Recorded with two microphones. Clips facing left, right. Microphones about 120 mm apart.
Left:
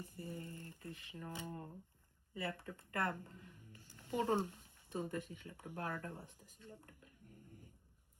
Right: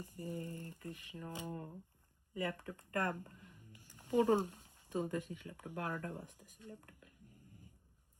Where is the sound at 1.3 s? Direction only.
15° right (ahead or behind).